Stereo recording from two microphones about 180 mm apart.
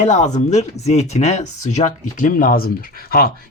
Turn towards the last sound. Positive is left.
turn(degrees=55)  # may be behind; listen again after turning